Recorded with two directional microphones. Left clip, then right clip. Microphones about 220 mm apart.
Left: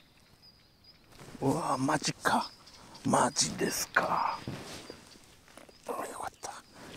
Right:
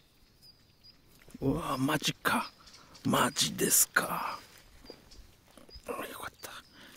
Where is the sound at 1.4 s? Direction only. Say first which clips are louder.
Left 2 dB; 30° right (ahead or behind).